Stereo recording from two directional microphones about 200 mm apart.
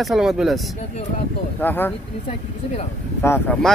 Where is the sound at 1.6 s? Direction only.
10° left (ahead or behind).